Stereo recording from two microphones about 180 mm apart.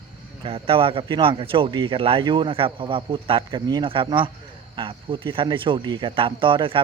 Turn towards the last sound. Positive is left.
turn(degrees=-30)  # may be behind; listen again after turning